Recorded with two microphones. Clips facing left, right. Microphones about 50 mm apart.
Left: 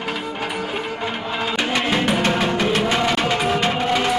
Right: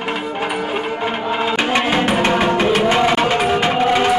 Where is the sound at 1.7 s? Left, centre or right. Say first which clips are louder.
Right 2 dB; centre.